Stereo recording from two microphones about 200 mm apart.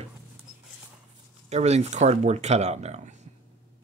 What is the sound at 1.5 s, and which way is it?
Speech, 35° right (ahead or behind).